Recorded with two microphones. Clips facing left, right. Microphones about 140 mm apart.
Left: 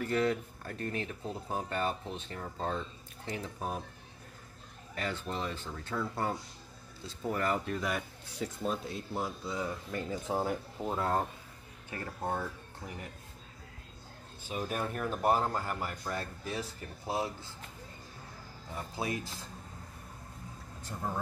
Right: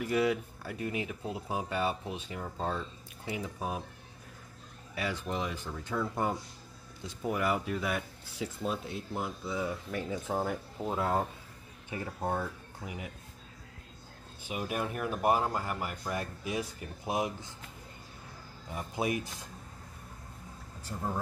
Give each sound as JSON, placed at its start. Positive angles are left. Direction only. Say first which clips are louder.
{"t": 0.0, "sound": "speech", "louder": "right 1 dB", "side_deg": -10}
{"t": 4.9, "sound": "speech", "louder": "right 2 dB", "side_deg": -10}
{"t": 14.5, "sound": "speech", "louder": "right 1 dB", "side_deg": -10}
{"t": 18.8, "sound": "speech", "louder": "right 4 dB", "side_deg": -20}
{"t": 20.9, "sound": "speech", "louder": "right 1 dB", "side_deg": 0}